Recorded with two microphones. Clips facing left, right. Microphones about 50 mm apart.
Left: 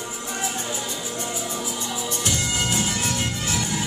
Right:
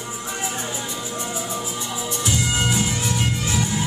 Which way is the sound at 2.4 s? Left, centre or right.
Right.